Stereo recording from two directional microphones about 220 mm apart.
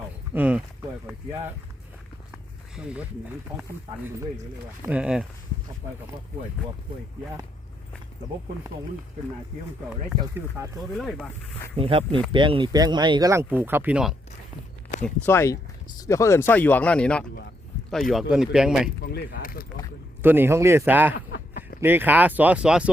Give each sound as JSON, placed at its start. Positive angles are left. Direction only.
{"t": 0.3, "sound": "speech", "side_deg": -5}
{"t": 2.7, "sound": "speech", "side_deg": -5}
{"t": 4.9, "sound": "speech", "side_deg": -5}
{"t": 10.6, "sound": "speech", "side_deg": -10}
{"t": 10.9, "sound": "speech", "side_deg": 0}
{"t": 11.8, "sound": "speech", "side_deg": -25}
{"t": 15.0, "sound": "speech", "side_deg": 10}
{"t": 19.0, "sound": "speech", "side_deg": 45}
{"t": 20.2, "sound": "speech", "side_deg": -10}
{"t": 21.3, "sound": "a sound", "side_deg": 45}
{"t": 21.8, "sound": "speech", "side_deg": -10}